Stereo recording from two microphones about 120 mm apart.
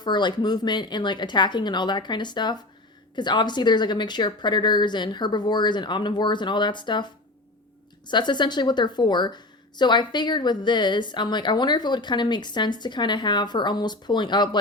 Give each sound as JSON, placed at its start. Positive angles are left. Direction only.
{"t": 0.0, "sound": "speech", "side_deg": 40}